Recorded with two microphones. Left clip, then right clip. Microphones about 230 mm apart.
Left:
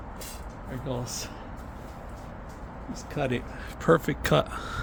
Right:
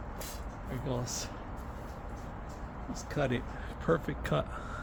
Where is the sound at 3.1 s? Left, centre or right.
Left.